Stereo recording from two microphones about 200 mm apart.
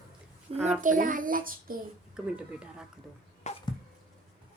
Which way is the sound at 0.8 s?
40° right (ahead or behind).